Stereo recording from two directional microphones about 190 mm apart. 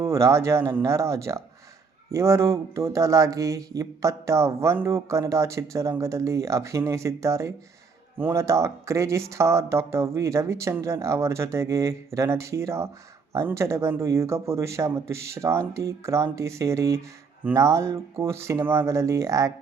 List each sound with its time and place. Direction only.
0.0 s speech: 15° right (ahead or behind)